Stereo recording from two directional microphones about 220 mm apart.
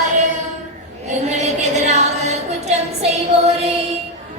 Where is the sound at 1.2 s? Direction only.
30° right (ahead or behind).